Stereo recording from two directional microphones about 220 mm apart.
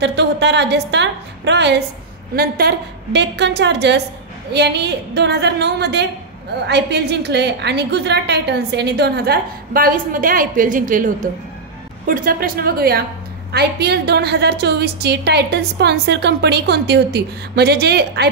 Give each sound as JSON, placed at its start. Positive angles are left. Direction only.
{"t": 0.0, "sound": "a woman's voice", "side_deg": -50}
{"t": 12.1, "sound": "a woman's voice", "side_deg": -40}